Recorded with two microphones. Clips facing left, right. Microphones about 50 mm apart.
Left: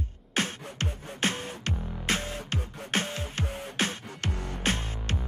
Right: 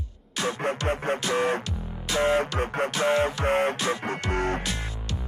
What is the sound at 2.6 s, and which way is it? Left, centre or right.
Music, right.